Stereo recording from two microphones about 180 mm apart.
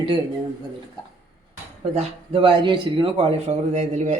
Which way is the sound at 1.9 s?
30° right (ahead or behind).